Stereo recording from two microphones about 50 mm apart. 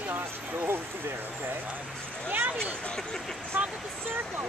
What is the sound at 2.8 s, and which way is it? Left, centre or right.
Speech, centre.